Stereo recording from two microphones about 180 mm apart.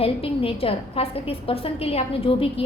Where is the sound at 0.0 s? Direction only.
30° left (ahead or behind).